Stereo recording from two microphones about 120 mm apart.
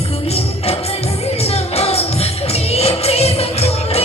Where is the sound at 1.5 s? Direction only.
55° left (ahead or behind).